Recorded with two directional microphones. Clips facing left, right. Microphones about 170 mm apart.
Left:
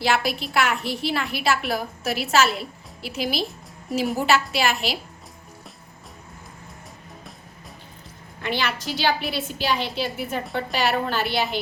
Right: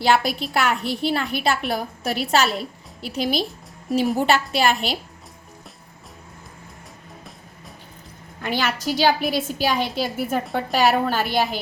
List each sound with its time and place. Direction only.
0.2 s a woman's voice: centre (ahead or behind)
8.4 s a woman's voice: 45° right (ahead or behind)